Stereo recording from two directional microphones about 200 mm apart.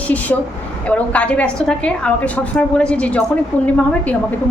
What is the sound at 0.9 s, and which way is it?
A woman's voice, 5° left (ahead or behind).